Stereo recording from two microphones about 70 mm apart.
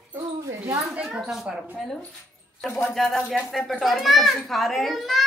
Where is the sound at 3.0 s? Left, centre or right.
Centre.